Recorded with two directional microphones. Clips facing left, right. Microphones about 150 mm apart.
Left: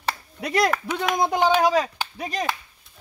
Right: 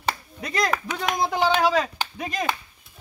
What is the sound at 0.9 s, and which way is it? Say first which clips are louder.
Speech: left 2 dB; 50° left (ahead or behind).